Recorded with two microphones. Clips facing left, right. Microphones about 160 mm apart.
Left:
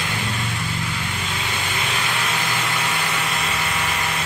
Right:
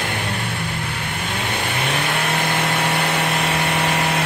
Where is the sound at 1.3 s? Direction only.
60° right (ahead or behind).